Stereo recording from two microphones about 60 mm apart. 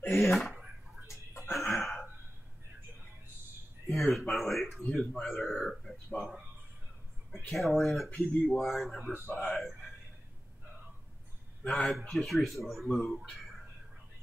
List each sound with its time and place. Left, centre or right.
0.1 s speech: centre
1.0 s whispering: left
1.8 s throat clearing: centre
3.9 s speech: centre
7.4 s speech: centre
9.6 s a sound: centre
11.6 s speech: centre